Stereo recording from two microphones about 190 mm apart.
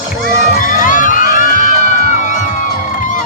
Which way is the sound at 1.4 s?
45° left (ahead or behind).